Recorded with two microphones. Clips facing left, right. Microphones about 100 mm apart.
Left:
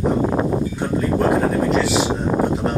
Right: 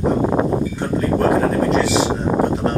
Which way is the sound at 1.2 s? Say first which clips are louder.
Right 1 dB; centre (ahead or behind).